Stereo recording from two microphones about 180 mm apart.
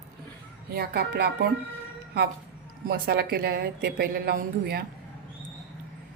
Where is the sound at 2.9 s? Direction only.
55° right (ahead or behind).